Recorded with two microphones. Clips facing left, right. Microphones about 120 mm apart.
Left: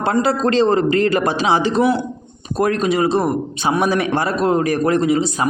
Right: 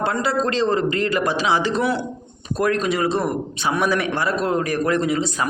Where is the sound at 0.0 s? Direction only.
30° left (ahead or behind).